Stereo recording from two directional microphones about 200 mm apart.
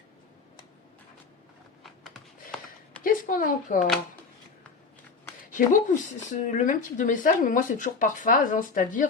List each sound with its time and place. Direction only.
1.8 s computer keyboard: centre (ahead or behind)
3.0 s speech: 45° left (ahead or behind)
5.5 s speech: 40° left (ahead or behind)